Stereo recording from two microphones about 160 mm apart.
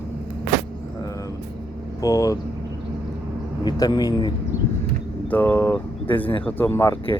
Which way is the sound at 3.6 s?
25° left (ahead or behind).